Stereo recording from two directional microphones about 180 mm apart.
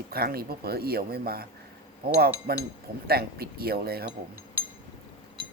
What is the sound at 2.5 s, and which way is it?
Cutlery, 60° right (ahead or behind).